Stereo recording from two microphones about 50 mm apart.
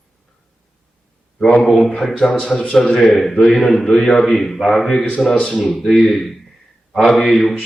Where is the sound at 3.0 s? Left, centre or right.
Centre.